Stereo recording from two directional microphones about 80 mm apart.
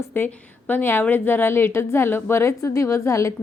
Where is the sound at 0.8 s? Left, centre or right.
Left.